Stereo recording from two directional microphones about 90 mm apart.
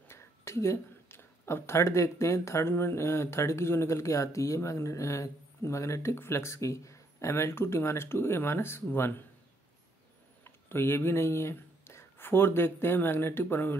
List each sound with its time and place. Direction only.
0.1 s a woman's voice: 30° left (ahead or behind)
10.4 s speech: 30° left (ahead or behind)